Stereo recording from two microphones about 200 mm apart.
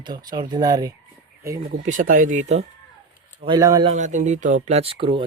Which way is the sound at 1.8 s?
40° right (ahead or behind).